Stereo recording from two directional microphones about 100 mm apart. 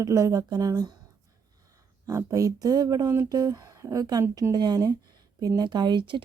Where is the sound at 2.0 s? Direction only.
35° right (ahead or behind).